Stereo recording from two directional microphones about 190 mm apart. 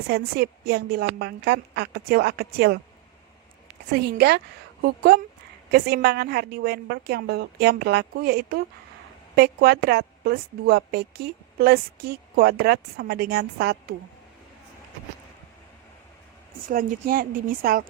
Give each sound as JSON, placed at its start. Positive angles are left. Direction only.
{"t": 0.1, "sound": "a woman's voice", "side_deg": -55}
{"t": 3.9, "sound": "a woman's voice", "side_deg": -55}
{"t": 16.6, "sound": "speech", "side_deg": -45}